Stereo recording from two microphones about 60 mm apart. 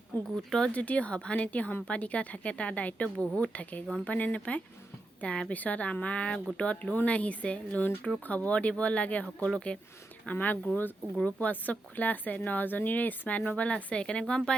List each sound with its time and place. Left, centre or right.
0.3 s speech: centre
0.7 s speech: left
10.3 s speech: left